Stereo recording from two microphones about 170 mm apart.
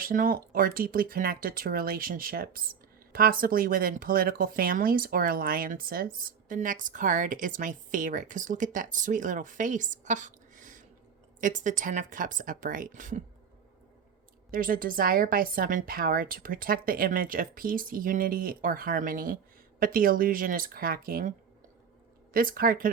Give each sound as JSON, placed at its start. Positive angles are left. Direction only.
{"t": 0.0, "sound": "speech", "side_deg": -55}
{"t": 14.5, "sound": "speech", "side_deg": -55}